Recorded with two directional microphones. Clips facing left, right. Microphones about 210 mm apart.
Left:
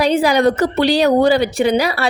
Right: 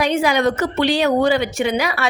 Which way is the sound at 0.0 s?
35° left (ahead or behind).